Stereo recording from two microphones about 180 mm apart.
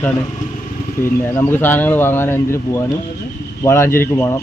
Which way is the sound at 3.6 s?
15° left (ahead or behind).